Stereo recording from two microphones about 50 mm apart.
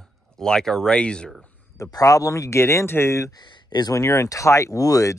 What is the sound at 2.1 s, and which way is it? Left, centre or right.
Speech, left.